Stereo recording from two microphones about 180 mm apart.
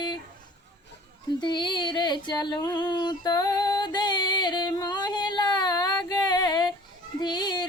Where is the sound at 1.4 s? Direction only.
25° left (ahead or behind).